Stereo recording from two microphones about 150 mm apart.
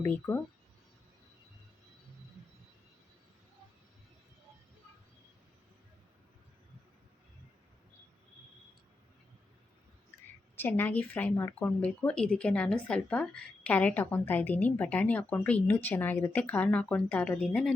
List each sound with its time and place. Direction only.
0.0 s a woman's voice: 15° left (ahead or behind)
10.6 s a woman's voice: 15° left (ahead or behind)